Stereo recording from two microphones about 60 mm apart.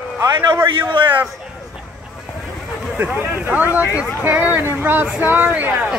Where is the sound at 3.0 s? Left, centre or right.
Right.